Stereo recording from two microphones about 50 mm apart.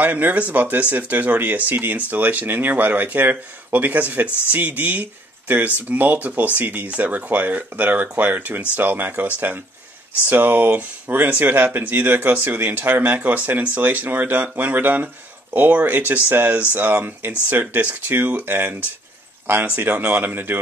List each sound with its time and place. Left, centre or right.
0.0 s speech: right